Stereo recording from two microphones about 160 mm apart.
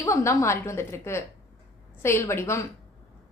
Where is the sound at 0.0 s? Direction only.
15° left (ahead or behind).